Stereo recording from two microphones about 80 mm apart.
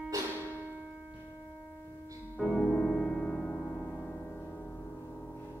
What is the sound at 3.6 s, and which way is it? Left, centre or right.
Music, centre.